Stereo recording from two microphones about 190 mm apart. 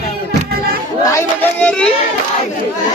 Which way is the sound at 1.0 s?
15° left (ahead or behind).